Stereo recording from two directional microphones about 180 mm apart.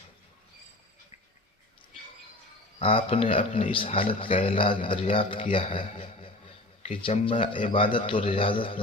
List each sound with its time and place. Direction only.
2.7 s a man's voice: 30° left (ahead or behind)